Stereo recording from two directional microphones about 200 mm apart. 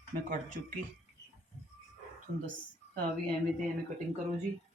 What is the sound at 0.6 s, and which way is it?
Speech, 50° right (ahead or behind).